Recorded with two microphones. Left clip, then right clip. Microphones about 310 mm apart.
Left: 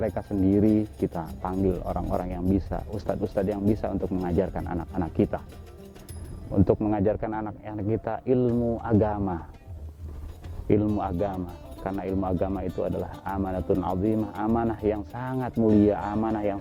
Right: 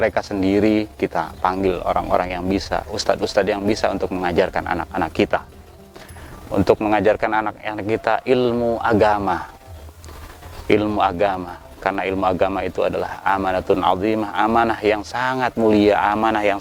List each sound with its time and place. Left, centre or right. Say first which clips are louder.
0.0 s speech: right 8 dB; centre
6.5 s speech: right 8 dB; centre
8.4 s speech: right 7 dB; centre
8.8 s speech: right 13 dB; centre
10.7 s speech: right 8 dB; centre